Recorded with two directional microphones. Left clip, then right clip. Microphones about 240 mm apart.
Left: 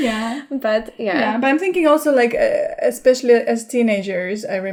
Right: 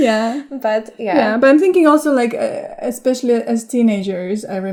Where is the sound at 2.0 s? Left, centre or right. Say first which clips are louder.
Left 1 dB; right.